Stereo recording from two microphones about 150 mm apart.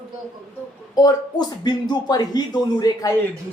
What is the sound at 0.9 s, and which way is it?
Speech, 25° left (ahead or behind).